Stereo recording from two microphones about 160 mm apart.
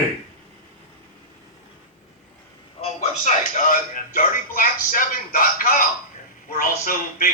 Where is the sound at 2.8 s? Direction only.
45° left (ahead or behind).